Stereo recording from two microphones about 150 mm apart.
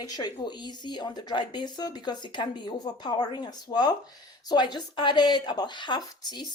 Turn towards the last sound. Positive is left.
turn(degrees=30)  # may be behind; listen again after turning